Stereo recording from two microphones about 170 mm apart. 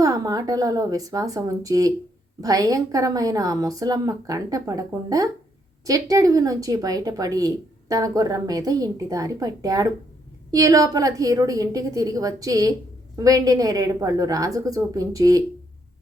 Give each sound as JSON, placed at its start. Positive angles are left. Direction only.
{"t": 0.0, "sound": "speech", "side_deg": -20}